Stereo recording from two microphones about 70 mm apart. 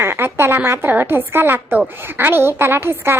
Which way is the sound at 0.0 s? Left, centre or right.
Right.